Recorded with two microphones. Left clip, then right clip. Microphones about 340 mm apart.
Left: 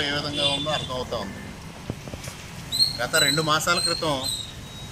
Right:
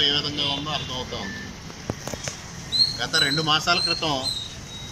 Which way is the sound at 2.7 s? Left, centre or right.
Right.